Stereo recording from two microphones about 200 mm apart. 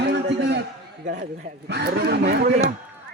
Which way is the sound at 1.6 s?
60° right (ahead or behind).